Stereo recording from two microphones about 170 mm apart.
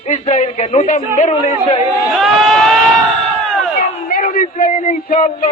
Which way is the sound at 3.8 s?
55° left (ahead or behind).